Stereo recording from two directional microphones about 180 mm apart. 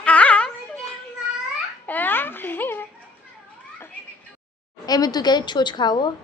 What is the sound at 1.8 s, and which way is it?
A woman's voice, 10° left (ahead or behind).